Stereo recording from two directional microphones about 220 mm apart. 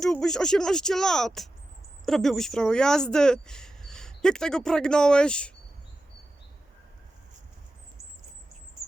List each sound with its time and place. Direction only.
0.0 s speech: centre (ahead or behind)